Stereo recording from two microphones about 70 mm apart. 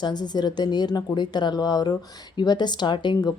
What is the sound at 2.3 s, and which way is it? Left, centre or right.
Speech, left.